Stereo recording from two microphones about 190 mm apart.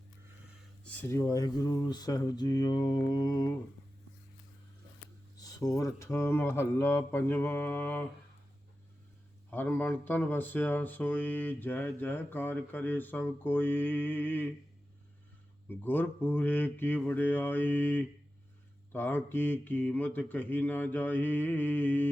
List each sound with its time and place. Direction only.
0.9 s speech: 15° left (ahead or behind)
5.4 s speech: 20° left (ahead or behind)
9.5 s speech: 10° left (ahead or behind)
15.7 s speech: 10° left (ahead or behind)